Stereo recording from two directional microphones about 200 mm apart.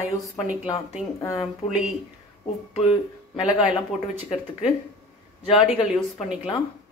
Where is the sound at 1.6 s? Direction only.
30° left (ahead or behind).